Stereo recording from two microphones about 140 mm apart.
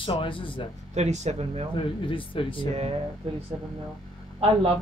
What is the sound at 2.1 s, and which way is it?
Speech, 35° left (ahead or behind).